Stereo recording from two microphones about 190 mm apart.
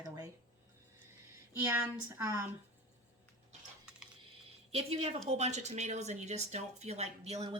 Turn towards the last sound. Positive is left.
turn(degrees=-35)  # may be behind; listen again after turning